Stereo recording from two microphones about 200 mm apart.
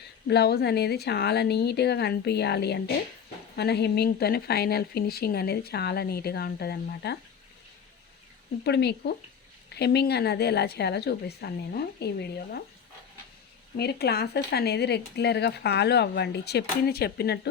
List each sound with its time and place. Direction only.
0.3 s speech: 55° left (ahead or behind)
8.6 s speech: 55° left (ahead or behind)
13.7 s speech: 55° left (ahead or behind)